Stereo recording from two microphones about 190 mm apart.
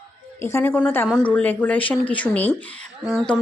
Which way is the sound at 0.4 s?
10° left (ahead or behind).